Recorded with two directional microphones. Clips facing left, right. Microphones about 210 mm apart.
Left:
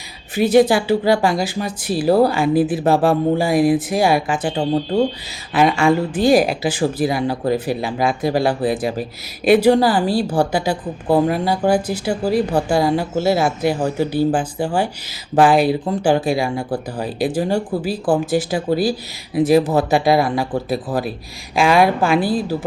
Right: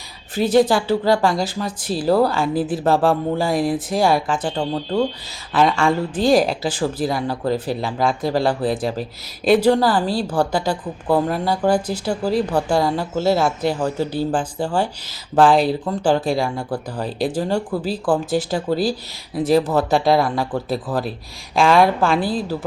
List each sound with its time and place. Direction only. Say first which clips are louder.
0.3 s speech: left 2 dB; 10° left (ahead or behind)
4.7 s speech: left 4 dB; 20° left (ahead or behind)
5.5 s speech: left 2 dB; 5° left (ahead or behind)